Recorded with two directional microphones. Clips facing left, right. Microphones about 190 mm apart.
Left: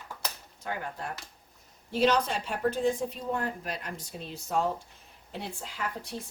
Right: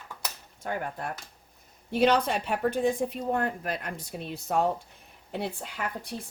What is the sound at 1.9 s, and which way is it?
A woman's voice, 60° right (ahead or behind).